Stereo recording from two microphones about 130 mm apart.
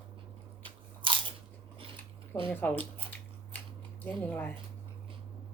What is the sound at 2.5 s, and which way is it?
Speech, 15° left (ahead or behind).